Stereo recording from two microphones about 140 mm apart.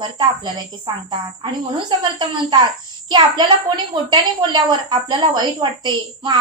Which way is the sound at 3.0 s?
30° right (ahead or behind).